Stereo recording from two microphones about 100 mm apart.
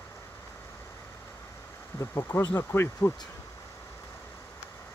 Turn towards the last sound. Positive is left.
turn(degrees=20)  # may be behind; listen again after turning